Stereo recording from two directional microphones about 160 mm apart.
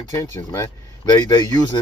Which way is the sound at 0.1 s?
20° left (ahead or behind).